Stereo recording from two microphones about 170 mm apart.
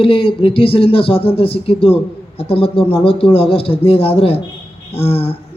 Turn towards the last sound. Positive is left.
turn(degrees=35)  # may be behind; listen again after turning